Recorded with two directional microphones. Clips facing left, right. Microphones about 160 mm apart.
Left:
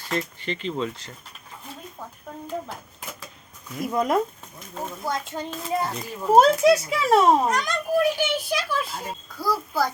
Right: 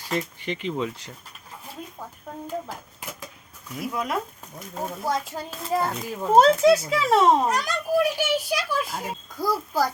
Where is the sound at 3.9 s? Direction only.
40° left (ahead or behind).